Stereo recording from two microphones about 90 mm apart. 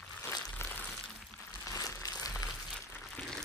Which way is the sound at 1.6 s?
35° left (ahead or behind).